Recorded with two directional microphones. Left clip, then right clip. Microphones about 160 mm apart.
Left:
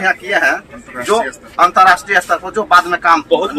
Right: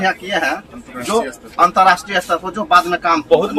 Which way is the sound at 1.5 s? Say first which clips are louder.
Left 3 dB; 25° right (ahead or behind).